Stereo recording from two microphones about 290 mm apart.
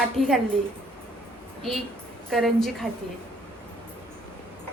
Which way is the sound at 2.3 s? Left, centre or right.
Centre.